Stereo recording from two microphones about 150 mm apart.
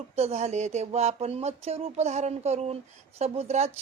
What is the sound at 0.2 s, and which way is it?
Speech, 45° right (ahead or behind).